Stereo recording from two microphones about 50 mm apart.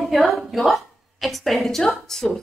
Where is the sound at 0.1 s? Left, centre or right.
Centre.